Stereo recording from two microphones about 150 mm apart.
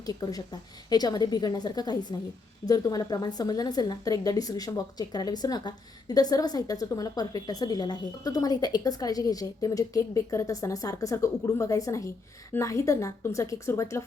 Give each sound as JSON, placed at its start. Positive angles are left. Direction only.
{"t": 0.0, "sound": "a woman's voice", "side_deg": 25}